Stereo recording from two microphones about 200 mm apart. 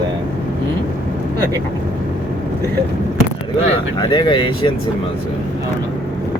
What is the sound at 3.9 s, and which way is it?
Speech, 25° left (ahead or behind).